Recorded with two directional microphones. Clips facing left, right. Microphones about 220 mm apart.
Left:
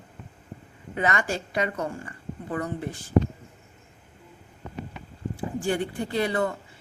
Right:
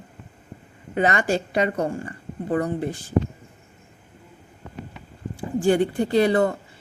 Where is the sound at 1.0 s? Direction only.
30° right (ahead or behind).